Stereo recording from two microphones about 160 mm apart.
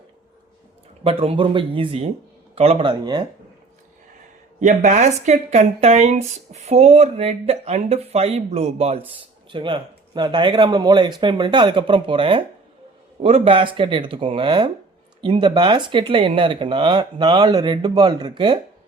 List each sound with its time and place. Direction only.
1.0 s speech: 35° right (ahead or behind)
4.6 s speech: 45° right (ahead or behind); by 18.6 s 30° right (ahead or behind)